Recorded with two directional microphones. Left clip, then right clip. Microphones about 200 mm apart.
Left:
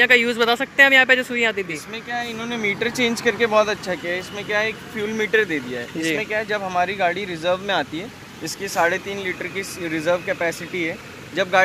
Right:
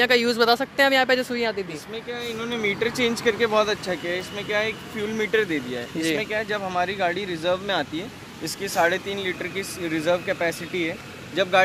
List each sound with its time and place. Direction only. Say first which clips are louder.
0.0 s speech: left 3 dB; 5° right (ahead or behind)
1.7 s speech: left 4 dB; 40° left (ahead or behind); by 5.6 s 15° left (ahead or behind)
5.9 s speech: left 2 dB; 5° right (ahead or behind)
6.5 s speech: left 3 dB; 25° left (ahead or behind)
8.7 s speech: left 2 dB; 5° right (ahead or behind)
11.4 s speech: left 1 dB; 20° left (ahead or behind)